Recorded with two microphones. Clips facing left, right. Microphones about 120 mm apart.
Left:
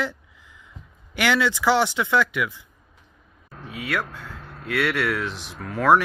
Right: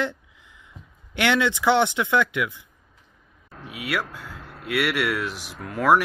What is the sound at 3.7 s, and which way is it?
Speech, 10° right (ahead or behind).